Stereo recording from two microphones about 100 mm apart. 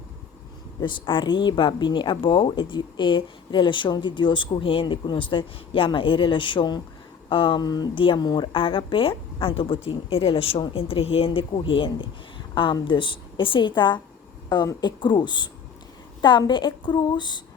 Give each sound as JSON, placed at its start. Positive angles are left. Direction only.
{"t": 0.8, "sound": "a woman's voice", "side_deg": 55}
{"t": 7.6, "sound": "speech", "side_deg": 40}
{"t": 7.9, "sound": "a woman's voice", "side_deg": 60}
{"t": 8.2, "sound": "a woman's voice", "side_deg": 45}